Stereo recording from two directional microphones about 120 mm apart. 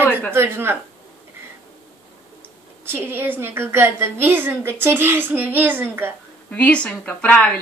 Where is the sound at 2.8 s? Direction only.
20° right (ahead or behind).